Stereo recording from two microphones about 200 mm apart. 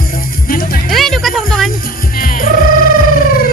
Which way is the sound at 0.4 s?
45° left (ahead or behind).